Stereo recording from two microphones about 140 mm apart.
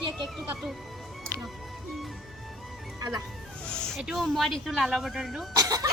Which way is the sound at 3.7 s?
5° left (ahead or behind).